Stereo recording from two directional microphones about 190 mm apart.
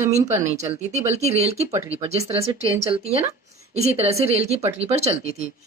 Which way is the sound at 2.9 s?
30° right (ahead or behind).